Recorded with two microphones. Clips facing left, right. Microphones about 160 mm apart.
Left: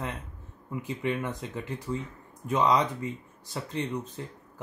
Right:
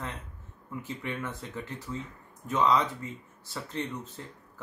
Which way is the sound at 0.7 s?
15° left (ahead or behind).